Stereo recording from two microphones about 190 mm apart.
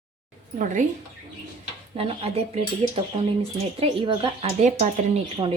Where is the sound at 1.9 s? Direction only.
30° right (ahead or behind).